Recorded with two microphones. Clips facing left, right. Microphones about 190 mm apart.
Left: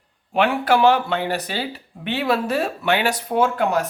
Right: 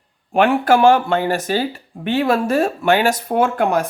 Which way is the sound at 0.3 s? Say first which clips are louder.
Right 4 dB; 45° right (ahead or behind).